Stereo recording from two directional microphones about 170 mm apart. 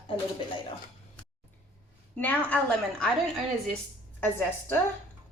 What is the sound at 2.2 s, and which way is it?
Speech, 10° left (ahead or behind).